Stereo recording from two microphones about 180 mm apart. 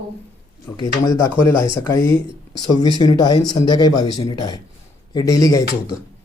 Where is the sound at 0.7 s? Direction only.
25° left (ahead or behind).